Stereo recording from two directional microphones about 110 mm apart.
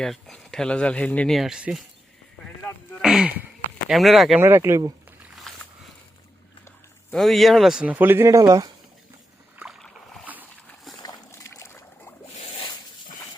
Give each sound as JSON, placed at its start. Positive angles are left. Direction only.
{"t": 0.0, "sound": "speech", "side_deg": 5}
{"t": 1.3, "sound": "speech", "side_deg": -5}
{"t": 3.0, "sound": "speech", "side_deg": -5}
{"t": 4.4, "sound": "speech", "side_deg": -20}
{"t": 5.5, "sound": "a sound", "side_deg": 5}
{"t": 7.1, "sound": "speech", "side_deg": 0}
{"t": 9.6, "sound": "boat", "side_deg": -5}
{"t": 11.3, "sound": "boat", "side_deg": 25}
{"t": 12.4, "sound": "zipper", "side_deg": 60}